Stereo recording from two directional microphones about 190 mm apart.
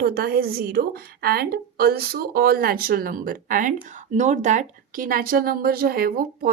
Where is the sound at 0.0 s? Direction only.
55° right (ahead or behind).